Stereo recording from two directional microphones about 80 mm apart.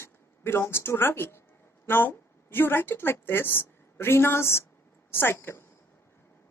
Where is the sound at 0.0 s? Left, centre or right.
Left.